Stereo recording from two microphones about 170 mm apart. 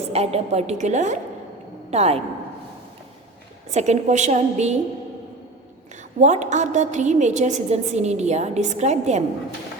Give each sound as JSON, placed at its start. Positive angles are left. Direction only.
{"t": 0.1, "sound": "a woman's voice", "side_deg": -40}
{"t": 3.7, "sound": "a woman's voice", "side_deg": -40}
{"t": 6.1, "sound": "a woman's voice", "side_deg": -45}